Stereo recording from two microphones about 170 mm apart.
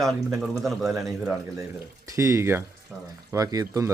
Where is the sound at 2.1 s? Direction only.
15° right (ahead or behind).